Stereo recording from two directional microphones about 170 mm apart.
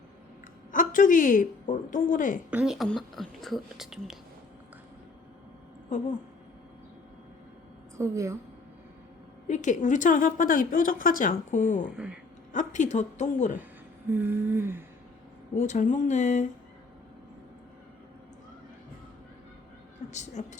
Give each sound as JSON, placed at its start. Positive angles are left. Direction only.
{"t": 0.7, "sound": "a woman's voice", "side_deg": 50}
{"t": 2.5, "sound": "speech", "side_deg": -5}
{"t": 7.9, "sound": "humming", "side_deg": -15}
{"t": 9.5, "sound": "a woman's voice", "side_deg": 45}
{"t": 14.1, "sound": "humming", "side_deg": -15}
{"t": 15.5, "sound": "a woman's voice", "side_deg": 45}
{"t": 20.1, "sound": "a woman's voice", "side_deg": 45}